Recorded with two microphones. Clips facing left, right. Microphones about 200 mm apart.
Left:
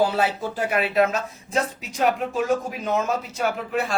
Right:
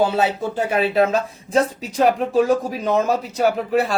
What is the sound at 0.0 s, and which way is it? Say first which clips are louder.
Speech: right 3 dB; 25° right (ahead or behind).